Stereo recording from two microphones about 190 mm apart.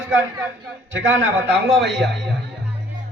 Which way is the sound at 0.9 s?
75° right (ahead or behind).